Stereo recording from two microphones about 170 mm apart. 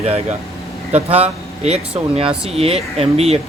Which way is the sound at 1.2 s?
40° right (ahead or behind).